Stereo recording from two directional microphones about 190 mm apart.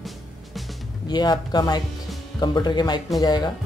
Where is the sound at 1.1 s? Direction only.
20° left (ahead or behind).